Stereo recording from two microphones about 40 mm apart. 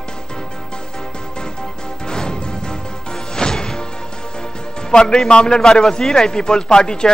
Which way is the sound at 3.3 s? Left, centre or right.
Centre.